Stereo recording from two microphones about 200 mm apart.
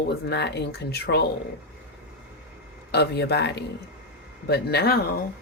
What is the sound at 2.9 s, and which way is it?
Speech, 55° left (ahead or behind).